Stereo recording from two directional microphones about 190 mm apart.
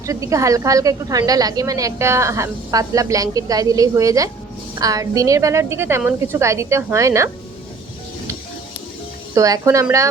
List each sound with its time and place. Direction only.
0.0 s a woman's voice: 15° right (ahead or behind)
9.3 s a woman's voice: 15° right (ahead or behind)